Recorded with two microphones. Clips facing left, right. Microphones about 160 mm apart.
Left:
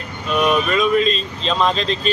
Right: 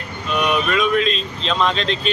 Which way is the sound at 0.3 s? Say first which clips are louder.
Left 2 dB; centre (ahead or behind).